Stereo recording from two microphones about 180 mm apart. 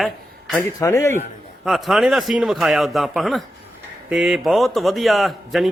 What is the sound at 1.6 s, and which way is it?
Speech, centre (ahead or behind).